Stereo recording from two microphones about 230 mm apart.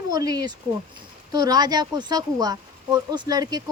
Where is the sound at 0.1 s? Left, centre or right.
Centre.